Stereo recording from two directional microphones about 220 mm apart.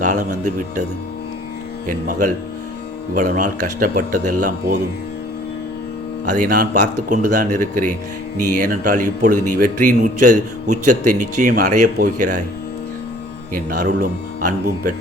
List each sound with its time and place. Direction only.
0.0 s a man's voice: 35° right (ahead or behind)
1.9 s a man's voice: 40° right (ahead or behind)
6.2 s a man's voice: 35° right (ahead or behind)
13.5 s a man's voice: 40° right (ahead or behind)